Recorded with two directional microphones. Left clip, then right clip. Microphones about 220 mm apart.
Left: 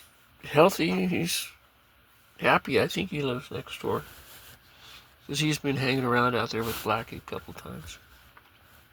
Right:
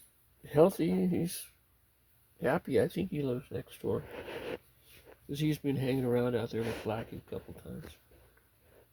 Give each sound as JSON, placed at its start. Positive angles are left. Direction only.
{"t": 0.4, "sound": "speech", "side_deg": 5}
{"t": 3.2, "sound": "speech", "side_deg": 20}
{"t": 5.3, "sound": "speech", "side_deg": 0}